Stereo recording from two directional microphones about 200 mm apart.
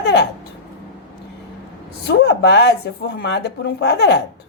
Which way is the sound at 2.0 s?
55° left (ahead or behind).